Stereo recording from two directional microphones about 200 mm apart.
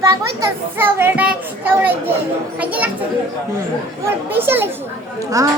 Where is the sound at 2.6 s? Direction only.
5° right (ahead or behind).